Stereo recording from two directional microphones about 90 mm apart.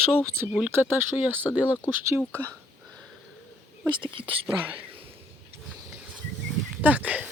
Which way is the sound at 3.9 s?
65° right (ahead or behind).